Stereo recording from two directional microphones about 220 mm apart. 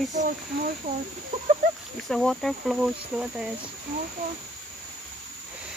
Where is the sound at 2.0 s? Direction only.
Centre (ahead or behind).